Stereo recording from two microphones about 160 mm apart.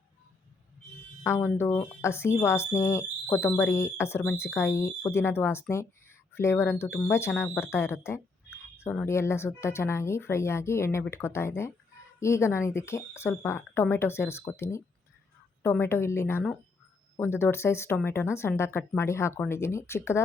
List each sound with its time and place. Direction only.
1.2 s speech: 15° left (ahead or behind)